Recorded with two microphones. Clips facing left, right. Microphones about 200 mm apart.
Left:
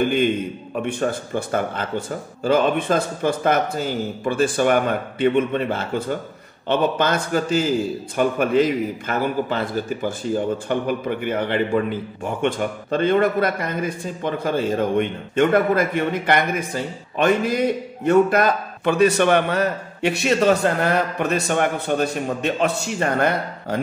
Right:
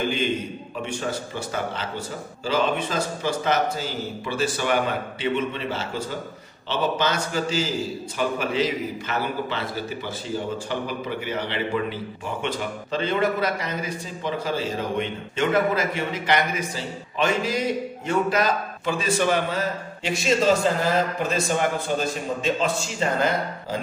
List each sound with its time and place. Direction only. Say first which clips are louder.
0.0 s a man's voice: left 6 dB; 55° left (ahead or behind)